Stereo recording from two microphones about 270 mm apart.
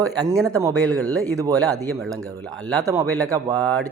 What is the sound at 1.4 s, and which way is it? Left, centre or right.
A man's voice, centre.